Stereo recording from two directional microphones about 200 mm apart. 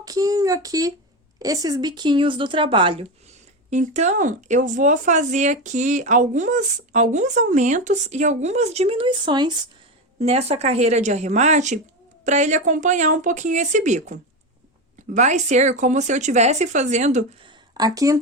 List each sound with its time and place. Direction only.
0.0 s speech: 15° right (ahead or behind)
10.2 s speech: 35° right (ahead or behind)
17.7 s speech: 20° right (ahead or behind)